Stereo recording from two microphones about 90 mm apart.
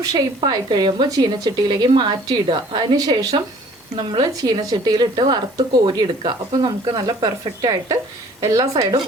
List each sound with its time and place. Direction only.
0.0 s a woman's voice: 45° right (ahead or behind)